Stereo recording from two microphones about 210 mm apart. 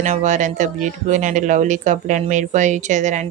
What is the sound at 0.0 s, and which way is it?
Speech, 35° right (ahead or behind).